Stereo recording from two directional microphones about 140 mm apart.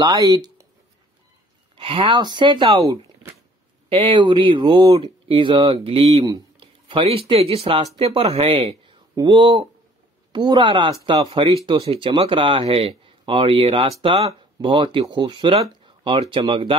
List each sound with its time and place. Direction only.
0.0 s speech: 25° right (ahead or behind)
1.8 s speech: 40° right (ahead or behind)
3.9 s speech: 35° right (ahead or behind)
6.2 s speech: 30° right (ahead or behind)